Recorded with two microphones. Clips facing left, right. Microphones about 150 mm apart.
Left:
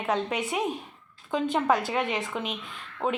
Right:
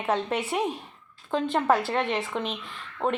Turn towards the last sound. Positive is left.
turn(degrees=0)  # may be behind; listen again after turning